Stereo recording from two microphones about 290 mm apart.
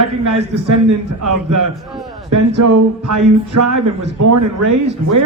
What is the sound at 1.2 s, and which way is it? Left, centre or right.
Speech, right.